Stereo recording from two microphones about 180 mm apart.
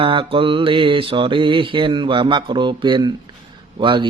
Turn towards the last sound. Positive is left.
turn(degrees=-25)  # may be behind; listen again after turning